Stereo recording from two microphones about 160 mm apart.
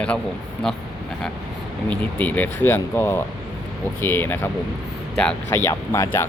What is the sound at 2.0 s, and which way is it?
Speech, 10° left (ahead or behind).